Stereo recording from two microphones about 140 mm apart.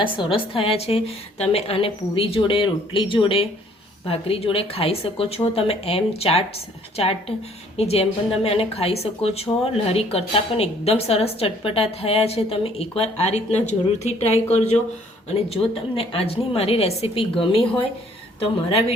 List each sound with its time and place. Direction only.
0.0 s a woman's voice: 35° left (ahead or behind)
15.4 s a woman's voice: 45° left (ahead or behind)